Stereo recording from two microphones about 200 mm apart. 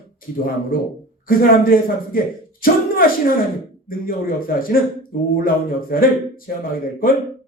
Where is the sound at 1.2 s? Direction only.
45° left (ahead or behind).